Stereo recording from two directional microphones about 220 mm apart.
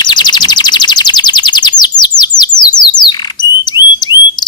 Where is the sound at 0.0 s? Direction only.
20° left (ahead or behind).